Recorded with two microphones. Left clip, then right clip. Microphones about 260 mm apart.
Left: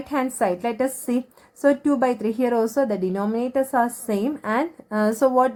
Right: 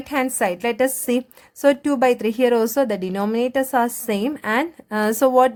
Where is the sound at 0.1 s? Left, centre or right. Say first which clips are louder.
Right 2 dB; right.